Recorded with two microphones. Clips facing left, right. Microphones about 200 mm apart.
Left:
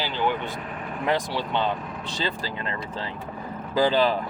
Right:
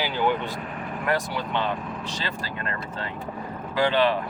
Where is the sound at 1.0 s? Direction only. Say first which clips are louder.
Left 1 dB; 30° left (ahead or behind).